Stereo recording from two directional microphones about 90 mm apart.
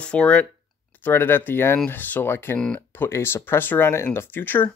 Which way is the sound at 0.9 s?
20° left (ahead or behind).